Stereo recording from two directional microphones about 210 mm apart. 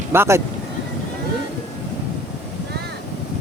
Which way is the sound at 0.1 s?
10° right (ahead or behind).